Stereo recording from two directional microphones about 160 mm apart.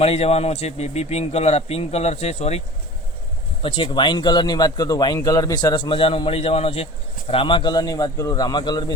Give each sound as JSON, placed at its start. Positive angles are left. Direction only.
{"t": 0.0, "sound": "a man's voice", "side_deg": 40}
{"t": 3.6, "sound": "speech", "side_deg": 30}